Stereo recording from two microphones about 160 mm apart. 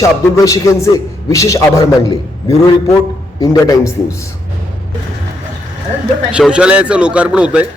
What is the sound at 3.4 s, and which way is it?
Speech, 20° left (ahead or behind).